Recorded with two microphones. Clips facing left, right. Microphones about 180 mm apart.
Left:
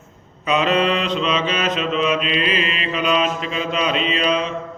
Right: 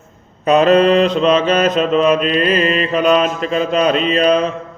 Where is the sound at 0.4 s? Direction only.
45° right (ahead or behind).